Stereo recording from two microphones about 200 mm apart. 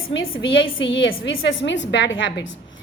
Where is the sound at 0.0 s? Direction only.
80° left.